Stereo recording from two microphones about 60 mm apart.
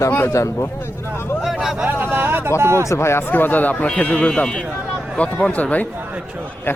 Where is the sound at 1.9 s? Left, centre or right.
Right.